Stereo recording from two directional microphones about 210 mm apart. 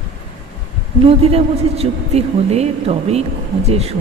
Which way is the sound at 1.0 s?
30° right (ahead or behind).